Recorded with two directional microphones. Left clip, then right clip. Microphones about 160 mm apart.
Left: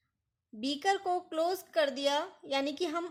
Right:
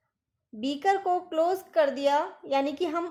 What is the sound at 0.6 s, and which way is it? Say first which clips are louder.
Speech: right 5 dB; 30° left (ahead or behind).